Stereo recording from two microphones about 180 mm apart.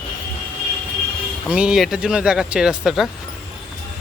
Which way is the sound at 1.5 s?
5° right (ahead or behind).